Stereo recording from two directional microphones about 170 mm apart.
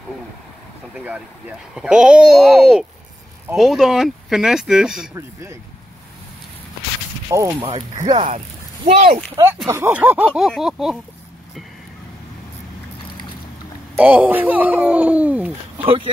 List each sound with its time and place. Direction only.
1.8 s speech: 5° right (ahead or behind)
5.1 s speech: 15° right (ahead or behind)
7.2 s speech: 15° right (ahead or behind)
8.8 s speech: 40° right (ahead or behind)
9.7 s speech: 15° right (ahead or behind)
13.9 s speech: 10° right (ahead or behind)